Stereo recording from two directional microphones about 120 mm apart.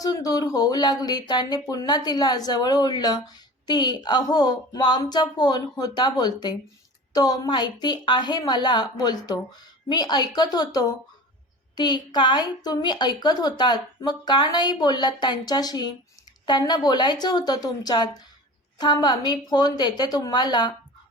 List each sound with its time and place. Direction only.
0.0 s speech: 30° left (ahead or behind)